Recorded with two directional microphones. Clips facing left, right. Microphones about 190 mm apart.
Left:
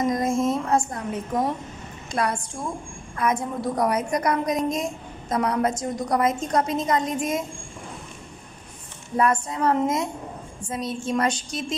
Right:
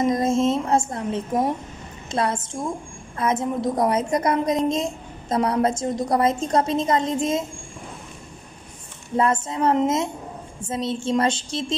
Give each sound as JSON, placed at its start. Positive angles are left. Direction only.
{"t": 0.0, "sound": "music", "side_deg": -25}
{"t": 2.0, "sound": "a woman's voice", "side_deg": -25}
{"t": 9.1, "sound": "a woman's voice", "side_deg": -25}